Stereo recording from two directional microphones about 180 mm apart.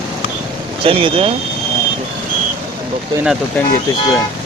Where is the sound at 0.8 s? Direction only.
30° right (ahead or behind).